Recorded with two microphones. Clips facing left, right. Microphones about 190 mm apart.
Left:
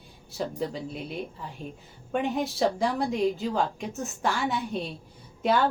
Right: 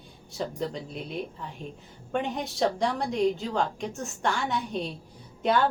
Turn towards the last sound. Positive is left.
turn(degrees=0)  # may be behind; listen again after turning